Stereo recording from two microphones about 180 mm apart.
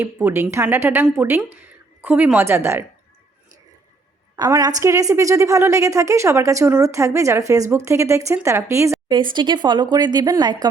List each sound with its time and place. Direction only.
0.0 s a woman's voice: 10° right (ahead or behind)
4.4 s a woman's voice: 20° right (ahead or behind)
9.0 s speech: 25° right (ahead or behind)